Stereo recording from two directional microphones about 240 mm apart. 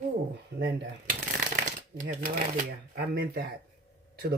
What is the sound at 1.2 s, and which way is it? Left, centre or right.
Shuffling cards, right.